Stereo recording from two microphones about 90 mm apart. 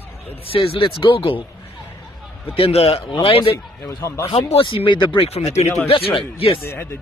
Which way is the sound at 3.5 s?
35° left (ahead or behind).